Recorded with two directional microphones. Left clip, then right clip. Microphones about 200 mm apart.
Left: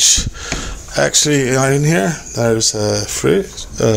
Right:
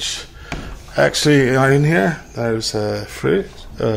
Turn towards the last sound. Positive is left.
turn(degrees=20)  # may be behind; listen again after turning